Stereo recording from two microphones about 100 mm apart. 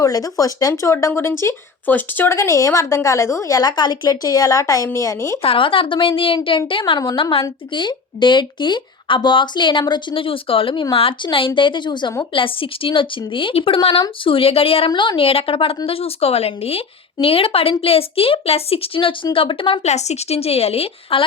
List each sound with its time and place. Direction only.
0.0 s speech: 35° left (ahead or behind)
5.4 s speech: 65° left (ahead or behind); by 12.1 s 50° left (ahead or behind)
12.3 s speech: 60° left (ahead or behind)
14.8 s speech: 50° left (ahead or behind)
15.3 s speech: 70° left (ahead or behind)
15.9 s speech: 75° left (ahead or behind)